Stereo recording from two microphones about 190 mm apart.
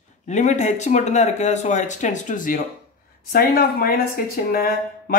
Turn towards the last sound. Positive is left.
turn(degrees=50)  # may be behind; listen again after turning